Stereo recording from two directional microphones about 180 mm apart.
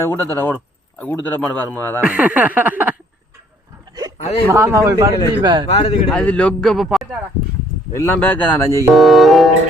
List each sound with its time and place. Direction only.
0.0 s speech: 15° left (ahead or behind)
2.0 s speech: 10° right (ahead or behind)
4.2 s speech: 35° left (ahead or behind)
4.5 s speech: 15° right (ahead or behind)
5.6 s speech: 30° left (ahead or behind)
6.1 s speech: 5° left (ahead or behind)
7.9 s speech: 10° left (ahead or behind)
8.9 s speech: centre (ahead or behind)